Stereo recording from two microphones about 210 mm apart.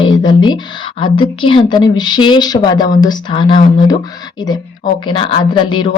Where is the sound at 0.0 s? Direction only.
20° left (ahead or behind).